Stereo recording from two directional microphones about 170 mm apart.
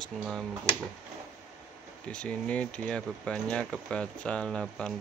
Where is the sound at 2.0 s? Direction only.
5° left (ahead or behind).